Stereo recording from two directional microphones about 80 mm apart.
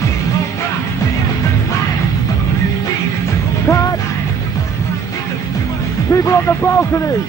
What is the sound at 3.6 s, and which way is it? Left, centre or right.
Music, left.